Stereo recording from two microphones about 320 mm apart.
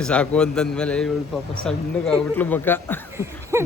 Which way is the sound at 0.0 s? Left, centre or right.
Centre.